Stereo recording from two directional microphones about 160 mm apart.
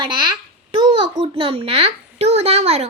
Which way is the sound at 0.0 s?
30° right (ahead or behind).